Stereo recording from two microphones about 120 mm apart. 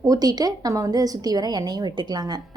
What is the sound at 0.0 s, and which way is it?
A woman's voice, 30° right (ahead or behind).